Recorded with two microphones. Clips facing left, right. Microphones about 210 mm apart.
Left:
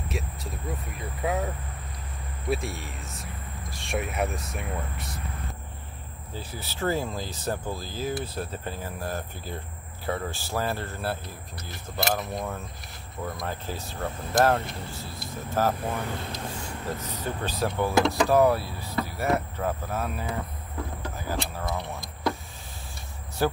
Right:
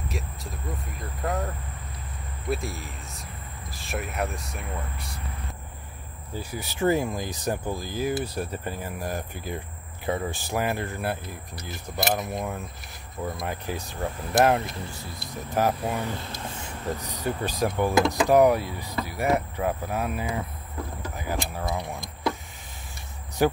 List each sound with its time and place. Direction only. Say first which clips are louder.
0.1 s speech: left 1 dB; centre (ahead or behind)
2.5 s speech: left 1 dB; centre (ahead or behind)
6.3 s speech: right 4 dB; 15° right (ahead or behind)
13.5 s speech: right 2 dB; 15° right (ahead or behind)
23.4 s speech: right 3 dB; 15° right (ahead or behind)